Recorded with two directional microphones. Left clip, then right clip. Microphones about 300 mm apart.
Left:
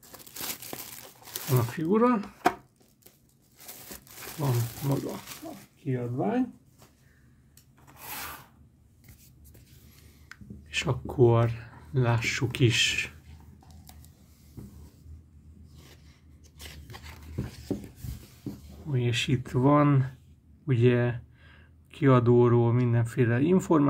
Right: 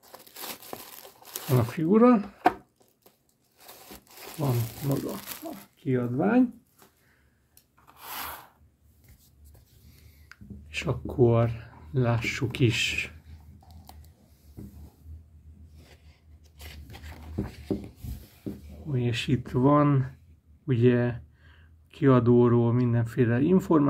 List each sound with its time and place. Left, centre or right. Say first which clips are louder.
0.3 s crumpling: left 1 dB; centre
1.3 s speech: right 2 dB; centre
4.4 s speech: right 1 dB; centre
5.9 s speech: right 4 dB; right
10.2 s speech: left 1 dB; centre
18.9 s speech: even; centre